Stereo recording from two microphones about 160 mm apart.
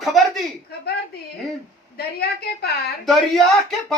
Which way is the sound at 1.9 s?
80° left.